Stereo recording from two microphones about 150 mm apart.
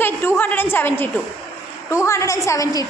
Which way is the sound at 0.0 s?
15° left (ahead or behind).